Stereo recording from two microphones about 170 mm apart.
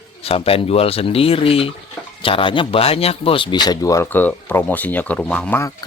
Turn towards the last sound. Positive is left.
turn(degrees=10)  # may be behind; listen again after turning